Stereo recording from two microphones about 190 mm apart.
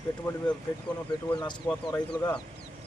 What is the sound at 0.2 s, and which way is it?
Speech, 10° left (ahead or behind).